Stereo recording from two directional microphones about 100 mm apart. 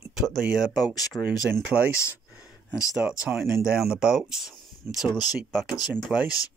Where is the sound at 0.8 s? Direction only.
40° left (ahead or behind).